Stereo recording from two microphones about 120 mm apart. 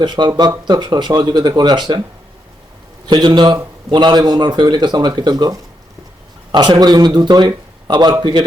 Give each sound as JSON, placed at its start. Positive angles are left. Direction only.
{"t": 0.0, "sound": "speech", "side_deg": -35}
{"t": 3.1, "sound": "a man's voice", "side_deg": -40}